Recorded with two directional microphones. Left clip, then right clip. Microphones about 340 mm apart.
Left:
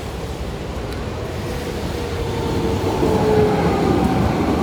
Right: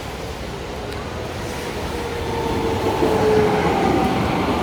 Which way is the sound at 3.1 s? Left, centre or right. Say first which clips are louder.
Left 1 dB; right.